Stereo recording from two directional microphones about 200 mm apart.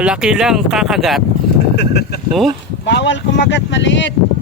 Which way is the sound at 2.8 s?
65° left (ahead or behind).